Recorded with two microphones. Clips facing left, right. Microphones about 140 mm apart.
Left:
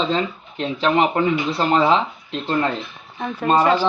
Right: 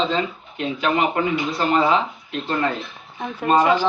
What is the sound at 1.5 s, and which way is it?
Speech, 30° left (ahead or behind).